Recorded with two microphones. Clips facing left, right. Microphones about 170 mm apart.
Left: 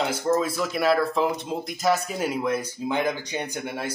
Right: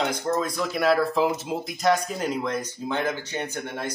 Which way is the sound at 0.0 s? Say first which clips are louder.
Left 2 dB; 5° left (ahead or behind).